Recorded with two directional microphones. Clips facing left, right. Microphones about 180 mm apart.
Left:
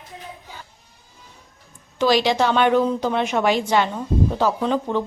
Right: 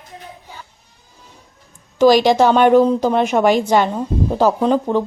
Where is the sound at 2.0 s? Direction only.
45° right (ahead or behind).